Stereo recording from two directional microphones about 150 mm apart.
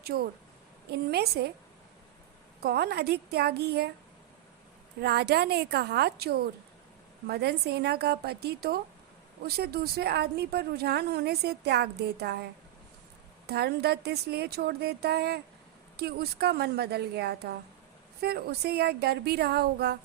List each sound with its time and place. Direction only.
0.9 s a woman's voice: 90° right
2.6 s a woman's voice: 90° right
4.9 s a woman's voice: 90° right
13.5 s a woman's voice: 90° right